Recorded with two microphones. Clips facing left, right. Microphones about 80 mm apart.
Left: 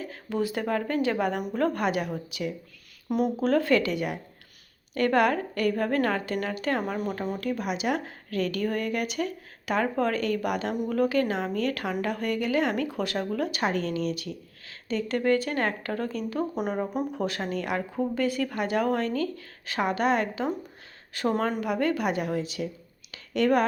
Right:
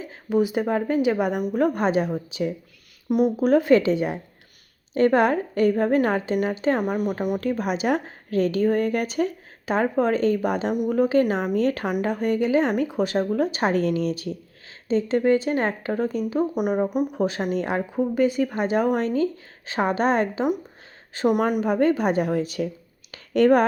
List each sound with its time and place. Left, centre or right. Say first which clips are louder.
0.0 s speech: right 7 dB; centre
1.8 s speech: right 5 dB; right
3.1 s speech: right 5 dB; centre; by 6.8 s right
6.8 s speech: right 6 dB; centre
7.4 s speech: right 3 dB; right
13.7 s speech: right 5 dB; right
17.9 s speech: right 7 dB; centre; by 22.7 s right
23.1 s a sound: right 6 dB; right